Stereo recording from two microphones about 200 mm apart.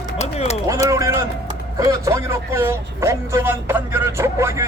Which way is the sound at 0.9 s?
15° right (ahead or behind).